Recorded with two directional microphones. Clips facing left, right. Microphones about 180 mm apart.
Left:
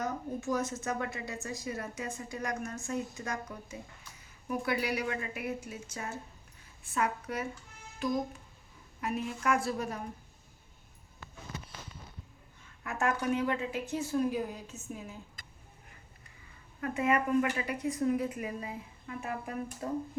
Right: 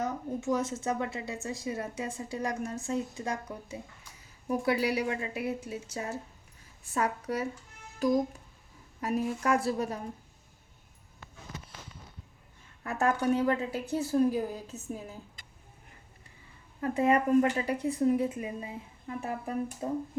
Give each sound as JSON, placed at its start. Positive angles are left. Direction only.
{"t": 0.0, "sound": "a woman's voice", "side_deg": -25}
{"t": 4.4, "sound": "a woman's voice", "side_deg": -35}
{"t": 12.8, "sound": "a woman's voice", "side_deg": -35}
{"t": 16.8, "sound": "a woman's voice", "side_deg": -35}